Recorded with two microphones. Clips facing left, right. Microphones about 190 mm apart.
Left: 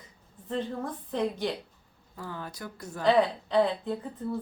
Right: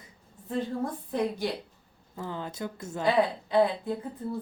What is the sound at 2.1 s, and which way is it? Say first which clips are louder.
Speech: right 3 dB; 20° right (ahead or behind).